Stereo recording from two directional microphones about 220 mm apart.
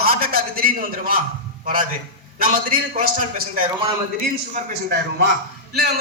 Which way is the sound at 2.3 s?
40° right (ahead or behind).